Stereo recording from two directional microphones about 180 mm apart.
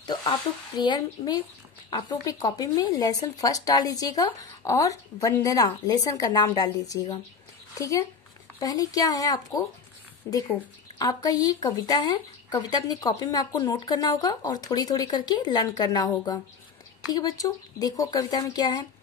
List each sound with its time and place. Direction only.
0.0 s a sound: 20° left (ahead or behind)
0.7 s speech: 25° left (ahead or behind)
8.5 s speech: 20° left (ahead or behind)
11.0 s speech: 20° left (ahead or behind)